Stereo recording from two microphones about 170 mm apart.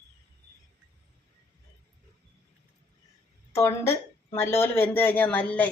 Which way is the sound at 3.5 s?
15° left (ahead or behind).